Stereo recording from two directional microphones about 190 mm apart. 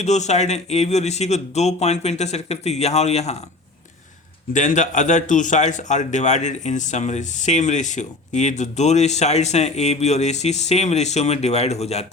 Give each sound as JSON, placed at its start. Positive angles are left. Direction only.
{"t": 0.0, "sound": "speech", "side_deg": 35}
{"t": 4.5, "sound": "speech", "side_deg": 40}